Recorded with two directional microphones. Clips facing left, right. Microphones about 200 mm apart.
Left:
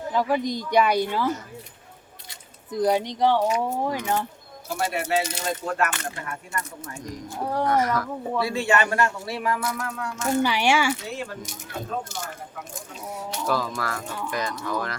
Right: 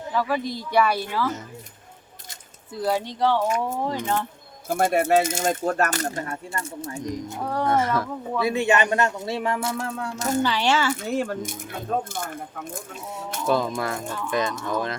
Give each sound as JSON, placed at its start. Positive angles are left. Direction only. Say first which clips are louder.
{"t": 0.1, "sound": "a woman's voice", "louder": "left 1 dB", "side_deg": 15}
{"t": 2.7, "sound": "a woman's voice", "louder": "left 3 dB", "side_deg": 15}
{"t": 4.7, "sound": "speech", "louder": "right 6 dB", "side_deg": -50}
{"t": 10.4, "sound": "a woman's voice", "louder": "left 1 dB", "side_deg": 10}
{"t": 10.9, "sound": "speech", "louder": "right 7 dB", "side_deg": -50}
{"t": 13.5, "sound": "speech", "louder": "right 4 dB", "side_deg": -20}